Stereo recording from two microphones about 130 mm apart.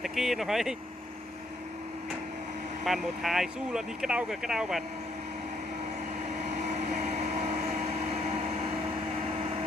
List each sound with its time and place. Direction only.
0.0 s speech: centre (ahead or behind)
2.8 s speech: centre (ahead or behind)
6.7 s vehicle: 60° right (ahead or behind)